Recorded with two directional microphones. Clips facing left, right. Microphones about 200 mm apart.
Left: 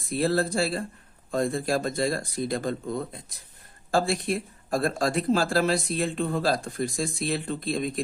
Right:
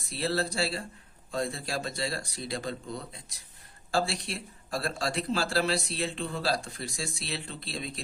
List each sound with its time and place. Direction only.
0.0 s speech: 50° left (ahead or behind)